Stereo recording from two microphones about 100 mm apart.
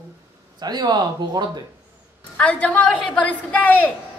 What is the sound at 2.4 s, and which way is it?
A man's voice, 10° left (ahead or behind).